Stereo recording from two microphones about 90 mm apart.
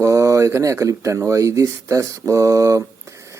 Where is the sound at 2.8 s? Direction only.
35° right (ahead or behind).